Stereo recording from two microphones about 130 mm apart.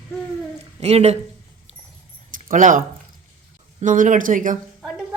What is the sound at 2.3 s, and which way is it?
Speech, 90° right.